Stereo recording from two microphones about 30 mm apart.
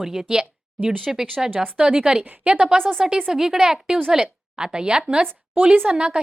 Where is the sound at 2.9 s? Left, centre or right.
Right.